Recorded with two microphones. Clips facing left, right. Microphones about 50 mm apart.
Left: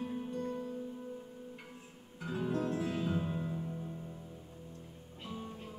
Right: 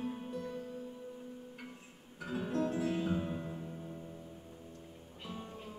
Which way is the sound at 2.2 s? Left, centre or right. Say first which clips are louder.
Even; right.